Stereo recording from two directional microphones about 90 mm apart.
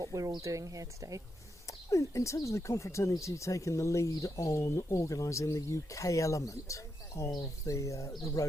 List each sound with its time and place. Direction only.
0.0 s speech: 40° right (ahead or behind)
1.6 s speech: 35° left (ahead or behind)